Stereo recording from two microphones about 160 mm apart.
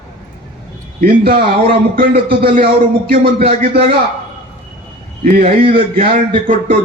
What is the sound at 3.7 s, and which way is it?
Speech, 80° right.